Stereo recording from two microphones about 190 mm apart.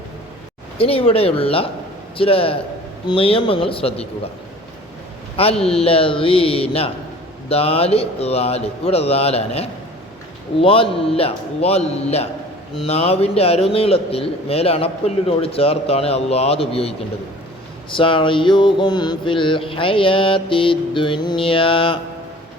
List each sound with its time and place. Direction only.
0.8 s mantra: 30° left (ahead or behind)
5.6 s mantra: 30° left (ahead or behind)
7.4 s a man's voice: 30° left (ahead or behind)
10.6 s mantra: 30° left (ahead or behind)
11.2 s a man's voice: 30° left (ahead or behind)
17.9 s mantra: 25° left (ahead or behind)